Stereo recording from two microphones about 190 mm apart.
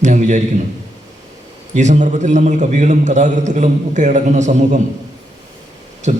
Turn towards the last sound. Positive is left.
turn(degrees=-40)  # may be behind; listen again after turning